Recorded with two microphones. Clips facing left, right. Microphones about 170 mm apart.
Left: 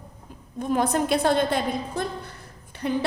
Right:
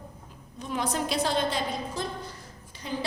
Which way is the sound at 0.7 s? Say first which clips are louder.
Left 5 dB; 55° left (ahead or behind).